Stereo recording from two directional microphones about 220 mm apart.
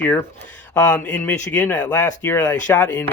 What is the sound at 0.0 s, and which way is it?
Speech, 10° left (ahead or behind).